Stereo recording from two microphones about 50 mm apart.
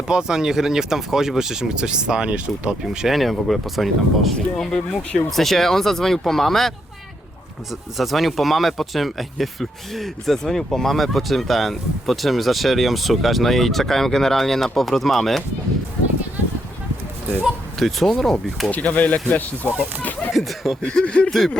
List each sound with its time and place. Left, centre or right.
0.1 s speech: centre
3.1 s speech: centre
4.4 s speech: centre
17.7 s speech: centre
18.7 s speech: left
20.3 s speech: centre
20.8 s speech: left